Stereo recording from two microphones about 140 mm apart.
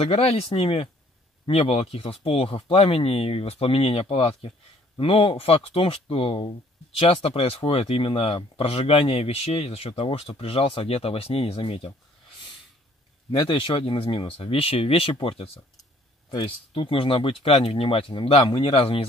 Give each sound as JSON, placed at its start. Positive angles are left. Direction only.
{"t": 0.0, "sound": "speech", "side_deg": 45}
{"t": 13.4, "sound": "speech", "side_deg": 35}